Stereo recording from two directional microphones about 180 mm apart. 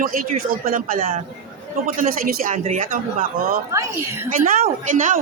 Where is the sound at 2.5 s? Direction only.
40° right (ahead or behind).